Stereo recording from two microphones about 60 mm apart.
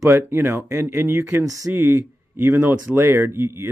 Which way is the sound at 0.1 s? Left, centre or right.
Right.